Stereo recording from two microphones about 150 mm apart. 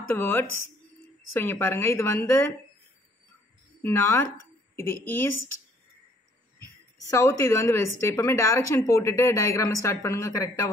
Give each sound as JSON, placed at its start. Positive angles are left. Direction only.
{"t": 0.1, "sound": "a woman's voice", "side_deg": 15}
{"t": 3.8, "sound": "a woman's voice", "side_deg": 15}
{"t": 7.1, "sound": "a woman's voice", "side_deg": 20}